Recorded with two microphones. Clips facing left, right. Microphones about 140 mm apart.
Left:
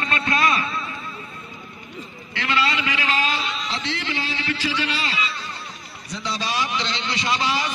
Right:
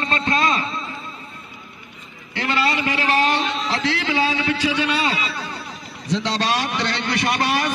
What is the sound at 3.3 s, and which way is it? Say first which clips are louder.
Music: right 5 dB; 55° right (ahead or behind).